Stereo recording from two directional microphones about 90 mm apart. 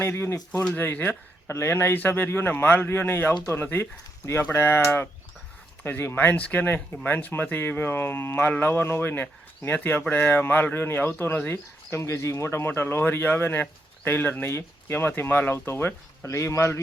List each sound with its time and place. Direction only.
0.0 s speech: 30° left (ahead or behind)
11.5 s speech: 30° left (ahead or behind)